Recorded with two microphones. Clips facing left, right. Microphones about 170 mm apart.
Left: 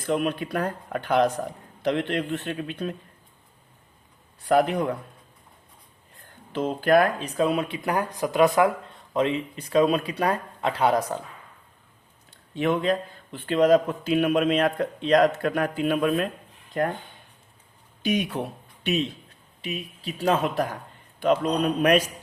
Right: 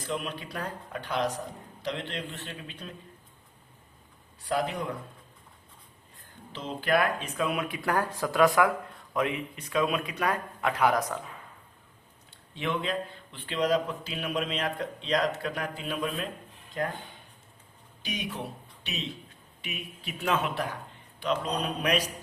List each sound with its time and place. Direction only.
0.1 s speech: 55° left (ahead or behind)
4.4 s speech: 60° left (ahead or behind)
6.5 s speech: 50° left (ahead or behind); by 11.2 s 30° left (ahead or behind)
12.5 s a man's voice: 45° left (ahead or behind)
18.0 s speech: 55° left (ahead or behind)
19.6 s speech: 35° left (ahead or behind)
21.2 s a man's voice: 50° left (ahead or behind)